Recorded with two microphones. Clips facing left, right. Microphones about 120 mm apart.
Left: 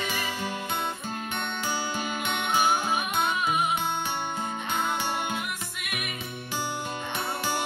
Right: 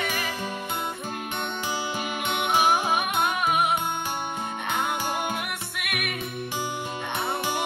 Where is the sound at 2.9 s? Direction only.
60° right (ahead or behind).